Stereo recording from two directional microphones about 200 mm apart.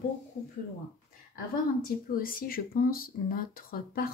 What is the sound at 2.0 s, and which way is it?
A woman's voice, 45° left (ahead or behind).